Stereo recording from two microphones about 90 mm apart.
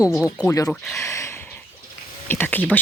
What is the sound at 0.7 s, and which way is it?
Speech, centre (ahead or behind).